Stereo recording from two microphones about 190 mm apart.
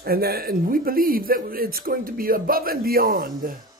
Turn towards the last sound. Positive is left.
turn(degrees=-50)  # may be behind; listen again after turning